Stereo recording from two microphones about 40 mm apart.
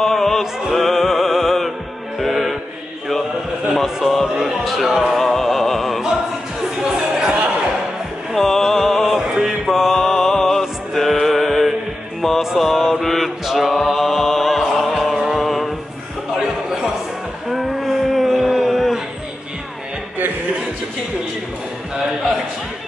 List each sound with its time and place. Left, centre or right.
0.0 s music: centre
3.7 s speech: centre
6.6 s music: centre
8.3 s music: centre
9.3 s music: centre
12.5 s mantra: centre
13.7 s music: centre
15.1 s music: centre
15.4 s music: centre
16.3 s a sound: centre